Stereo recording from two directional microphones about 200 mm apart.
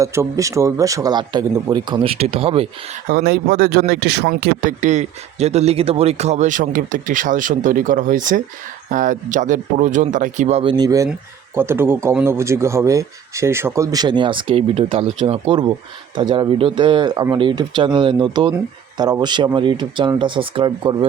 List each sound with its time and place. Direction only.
0.0 s a man's voice: 15° right (ahead or behind)
3.1 s a man's voice: 50° right (ahead or behind); by 20.9 s 25° right (ahead or behind)